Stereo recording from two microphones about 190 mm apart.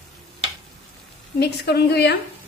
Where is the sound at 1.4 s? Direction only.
60° left (ahead or behind).